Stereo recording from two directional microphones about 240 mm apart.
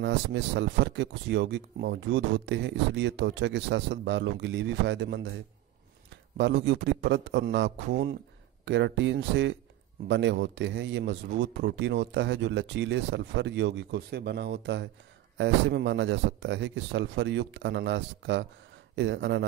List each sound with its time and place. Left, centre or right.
0.0 s speech: right
6.3 s speech: right